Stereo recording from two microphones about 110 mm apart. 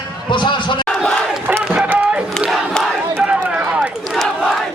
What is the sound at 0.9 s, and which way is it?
Battle cry, 5° left (ahead or behind).